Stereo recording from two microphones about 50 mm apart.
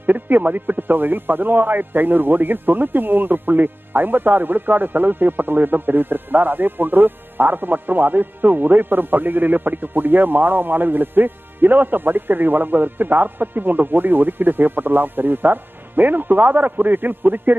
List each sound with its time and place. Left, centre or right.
0.0 s speech: right